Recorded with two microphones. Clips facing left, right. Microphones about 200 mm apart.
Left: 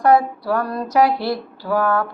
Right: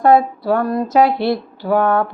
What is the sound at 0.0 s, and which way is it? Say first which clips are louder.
Speech: right 3 dB; 25° right (ahead or behind).